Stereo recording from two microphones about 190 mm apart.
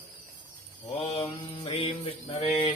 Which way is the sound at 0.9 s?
30° left (ahead or behind).